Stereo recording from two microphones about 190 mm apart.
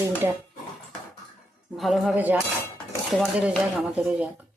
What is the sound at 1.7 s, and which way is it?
Speech, centre (ahead or behind).